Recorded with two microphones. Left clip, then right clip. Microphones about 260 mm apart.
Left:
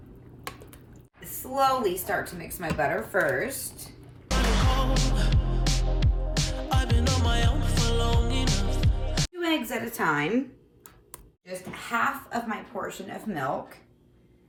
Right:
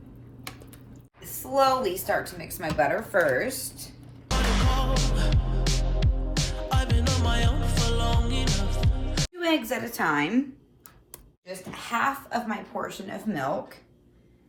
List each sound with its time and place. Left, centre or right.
1.5 s speech: centre
4.3 s music: centre
9.4 s speech: centre
11.9 s speech: centre